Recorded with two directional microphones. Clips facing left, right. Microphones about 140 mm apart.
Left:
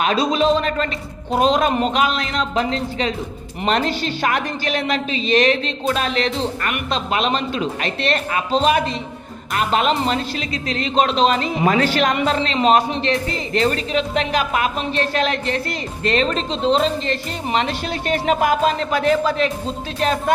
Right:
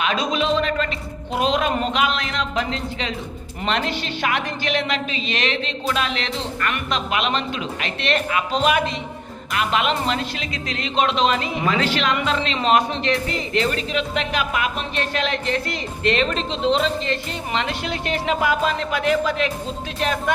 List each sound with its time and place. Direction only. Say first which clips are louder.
0.0 s speech: left 4 dB; 35° left (ahead or behind)